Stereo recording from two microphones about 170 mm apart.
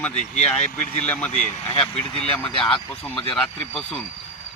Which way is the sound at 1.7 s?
35° left (ahead or behind).